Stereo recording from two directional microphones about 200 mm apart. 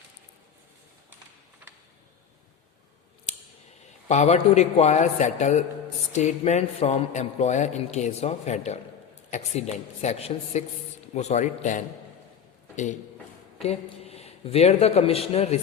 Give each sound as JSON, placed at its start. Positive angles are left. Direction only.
{"t": 4.1, "sound": "a man's voice", "side_deg": 35}